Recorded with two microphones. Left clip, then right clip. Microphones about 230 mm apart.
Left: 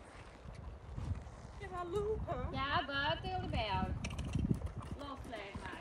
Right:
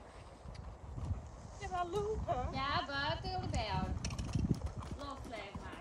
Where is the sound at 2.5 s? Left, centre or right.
Centre.